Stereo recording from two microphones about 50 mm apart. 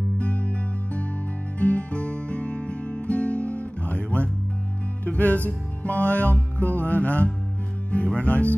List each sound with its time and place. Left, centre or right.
0.2 s music: left
7.9 s speech: left